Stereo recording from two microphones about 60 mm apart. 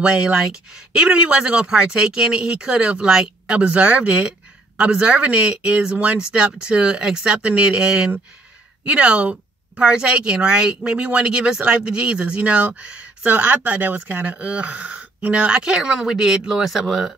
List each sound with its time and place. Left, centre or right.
0.0 s a woman's voice: centre